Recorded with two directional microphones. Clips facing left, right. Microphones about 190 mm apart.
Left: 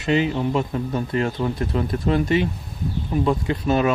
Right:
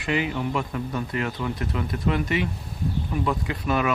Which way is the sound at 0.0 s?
30° left (ahead or behind).